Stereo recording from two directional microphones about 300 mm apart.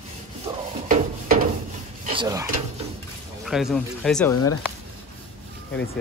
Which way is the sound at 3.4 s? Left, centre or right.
Centre.